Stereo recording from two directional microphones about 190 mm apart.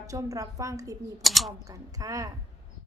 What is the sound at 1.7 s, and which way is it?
Speech, 20° right (ahead or behind).